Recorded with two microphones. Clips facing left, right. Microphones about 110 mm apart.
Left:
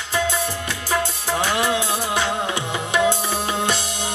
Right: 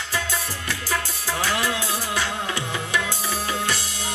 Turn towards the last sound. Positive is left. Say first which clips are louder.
# left 4 dB
turn(degrees=20)  # may be behind; listen again after turning